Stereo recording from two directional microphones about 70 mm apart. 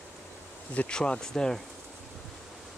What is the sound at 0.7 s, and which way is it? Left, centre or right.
Speech, left.